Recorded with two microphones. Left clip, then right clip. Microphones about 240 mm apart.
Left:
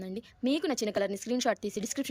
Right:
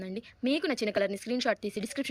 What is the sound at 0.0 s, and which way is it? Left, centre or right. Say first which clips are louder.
A woman's voice: even; centre.